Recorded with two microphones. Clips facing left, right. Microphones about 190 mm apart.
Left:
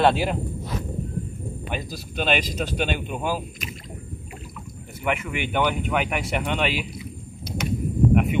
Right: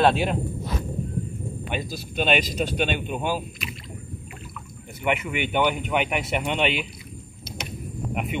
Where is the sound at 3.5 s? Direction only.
45° left (ahead or behind).